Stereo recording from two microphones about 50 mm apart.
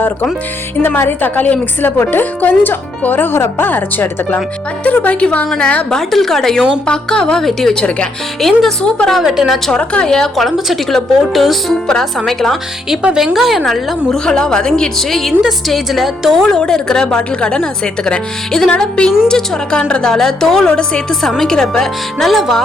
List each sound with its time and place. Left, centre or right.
0.9 s a woman's voice: left
1.4 s speech: left
4.8 s speech: left
5.9 s a woman's voice: centre
8.4 s speech: centre
9.2 s a woman's voice: centre
9.7 s speech: left
10.1 s speech: centre
13.1 s speech: centre
14.3 s a woman's voice: centre
16.5 s a woman's voice: centre
21.1 s a woman's voice: centre